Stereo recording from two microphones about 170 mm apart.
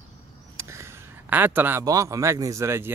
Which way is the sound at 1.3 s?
10° right (ahead or behind).